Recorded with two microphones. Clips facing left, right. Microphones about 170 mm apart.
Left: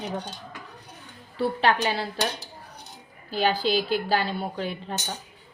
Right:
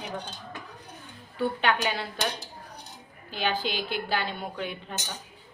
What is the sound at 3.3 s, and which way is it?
A woman's voice, 40° left (ahead or behind).